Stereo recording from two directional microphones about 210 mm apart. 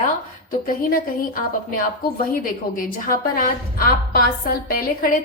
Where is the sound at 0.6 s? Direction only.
40° left (ahead or behind).